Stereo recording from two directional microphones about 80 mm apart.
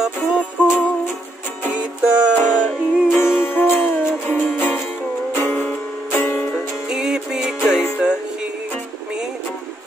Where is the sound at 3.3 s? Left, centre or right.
Left.